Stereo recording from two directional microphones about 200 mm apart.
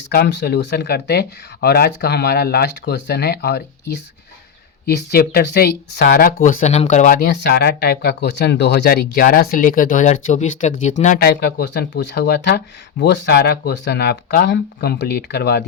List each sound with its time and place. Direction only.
0.1 s speech: 55° left (ahead or behind)